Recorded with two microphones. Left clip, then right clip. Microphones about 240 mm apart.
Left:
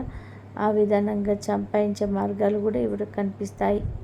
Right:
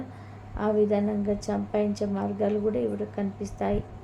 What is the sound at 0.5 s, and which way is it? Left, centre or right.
A woman's voice, left.